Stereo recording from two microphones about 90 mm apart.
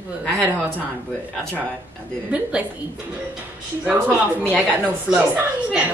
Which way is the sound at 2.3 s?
15° right (ahead or behind).